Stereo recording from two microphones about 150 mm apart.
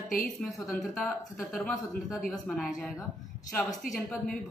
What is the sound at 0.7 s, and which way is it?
A man's voice, centre (ahead or behind).